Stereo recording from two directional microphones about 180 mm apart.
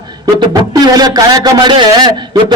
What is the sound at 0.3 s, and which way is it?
A man's voice, 25° right (ahead or behind).